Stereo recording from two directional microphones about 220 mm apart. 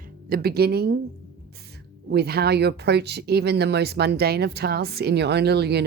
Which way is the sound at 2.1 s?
45° right (ahead or behind).